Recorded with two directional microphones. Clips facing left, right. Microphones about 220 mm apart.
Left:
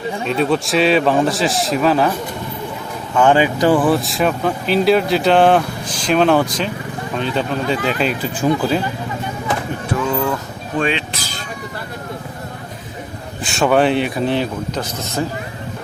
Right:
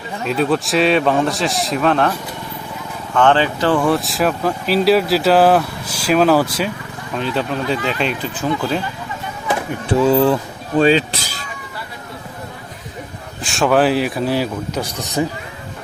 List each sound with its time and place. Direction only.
0.3 s speech: centre (ahead or behind)
3.2 s speech: 10° left (ahead or behind)
9.9 s speech: 30° right (ahead or behind)
13.4 s speech: centre (ahead or behind)